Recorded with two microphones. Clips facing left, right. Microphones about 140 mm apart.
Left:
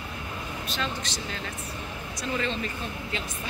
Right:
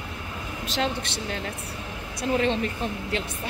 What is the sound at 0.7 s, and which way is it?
Speech, 70° right (ahead or behind).